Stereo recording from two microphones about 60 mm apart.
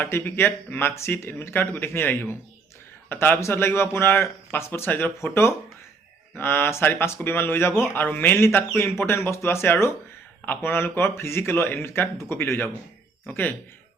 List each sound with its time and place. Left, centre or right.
0.0 s speech: left